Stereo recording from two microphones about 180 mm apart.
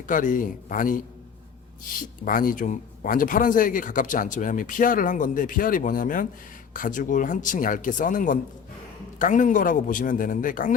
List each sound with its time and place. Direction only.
0.1 s speech: 45° left (ahead or behind)